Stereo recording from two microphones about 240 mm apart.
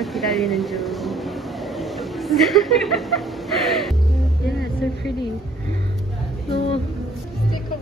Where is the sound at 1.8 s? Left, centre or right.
Centre.